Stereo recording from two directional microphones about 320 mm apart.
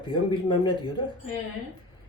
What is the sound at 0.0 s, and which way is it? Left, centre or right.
Speech, centre.